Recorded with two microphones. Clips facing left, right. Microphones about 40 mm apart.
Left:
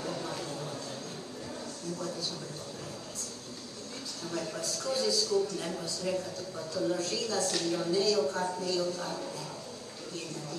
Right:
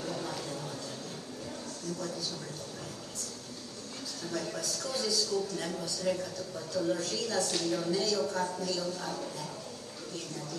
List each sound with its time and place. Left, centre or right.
2.0 s a man's voice: left
4.2 s a man's voice: left